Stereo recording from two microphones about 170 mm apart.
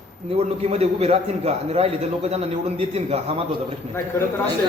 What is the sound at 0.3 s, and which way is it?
A man's voice, 35° right (ahead or behind).